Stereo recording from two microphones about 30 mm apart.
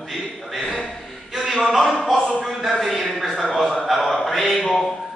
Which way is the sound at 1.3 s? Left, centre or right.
Centre.